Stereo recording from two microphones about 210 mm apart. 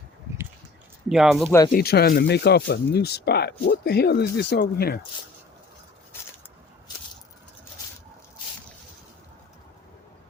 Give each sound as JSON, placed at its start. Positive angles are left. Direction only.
{"t": 1.0, "sound": "speech", "side_deg": 0}
{"t": 1.7, "sound": "speech", "side_deg": 50}